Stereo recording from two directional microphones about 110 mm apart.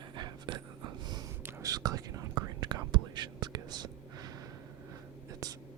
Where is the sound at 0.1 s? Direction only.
45° right (ahead or behind).